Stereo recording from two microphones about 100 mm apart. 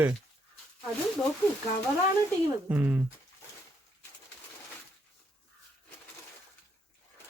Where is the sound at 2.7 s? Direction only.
20° right (ahead or behind).